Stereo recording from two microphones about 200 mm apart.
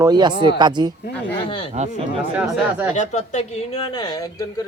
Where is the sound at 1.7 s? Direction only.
35° right (ahead or behind).